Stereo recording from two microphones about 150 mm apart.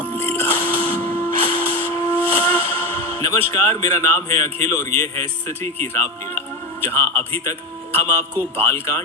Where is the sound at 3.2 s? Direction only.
20° left (ahead or behind).